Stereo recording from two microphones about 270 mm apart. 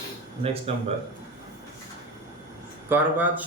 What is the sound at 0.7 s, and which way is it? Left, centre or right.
Speech, right.